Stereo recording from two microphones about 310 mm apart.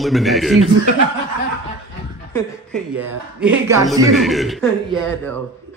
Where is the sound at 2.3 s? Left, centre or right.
Centre.